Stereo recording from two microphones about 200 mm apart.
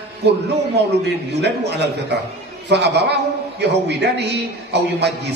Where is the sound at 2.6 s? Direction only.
55° right (ahead or behind).